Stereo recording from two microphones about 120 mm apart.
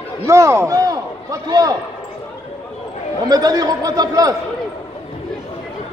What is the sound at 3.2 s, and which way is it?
A man's voice, 30° right (ahead or behind).